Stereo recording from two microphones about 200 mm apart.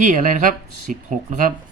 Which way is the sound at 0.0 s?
40° right (ahead or behind).